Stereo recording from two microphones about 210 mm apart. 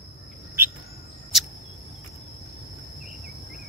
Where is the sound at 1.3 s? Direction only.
Centre (ahead or behind).